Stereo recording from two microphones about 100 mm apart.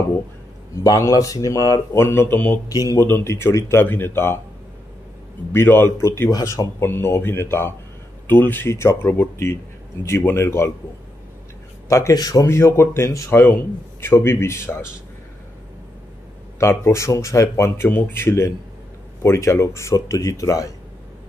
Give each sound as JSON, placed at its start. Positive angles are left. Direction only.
{"t": 0.8, "sound": "speech", "side_deg": 35}
{"t": 2.7, "sound": "speech", "side_deg": 35}
{"t": 3.0, "sound": "speech", "side_deg": 25}
{"t": 5.5, "sound": "speech", "side_deg": 20}
{"t": 11.9, "sound": "speech", "side_deg": 35}
{"t": 12.4, "sound": "speech", "side_deg": 25}
{"t": 16.5, "sound": "speech", "side_deg": 30}